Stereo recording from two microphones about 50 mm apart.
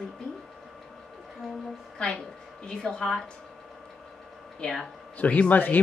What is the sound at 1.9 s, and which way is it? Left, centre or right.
A woman's voice, centre.